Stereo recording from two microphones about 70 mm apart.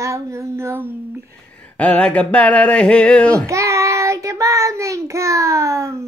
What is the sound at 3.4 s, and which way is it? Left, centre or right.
Child singing, right.